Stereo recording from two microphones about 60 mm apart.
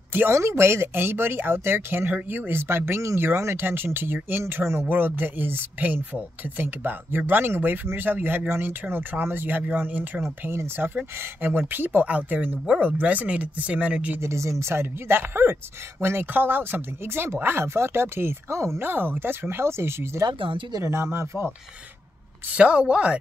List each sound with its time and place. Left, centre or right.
0.3 s speech: right
10.5 s speech: right
11.1 s speech: right
14.2 s speech: right
18.8 s speech: right
22.5 s speech: centre